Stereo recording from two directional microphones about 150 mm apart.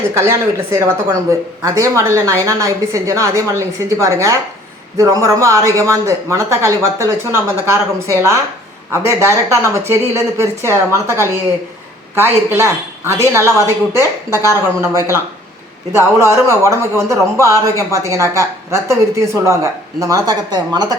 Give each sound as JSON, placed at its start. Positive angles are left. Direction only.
{"t": 0.1, "sound": "speech", "side_deg": -20}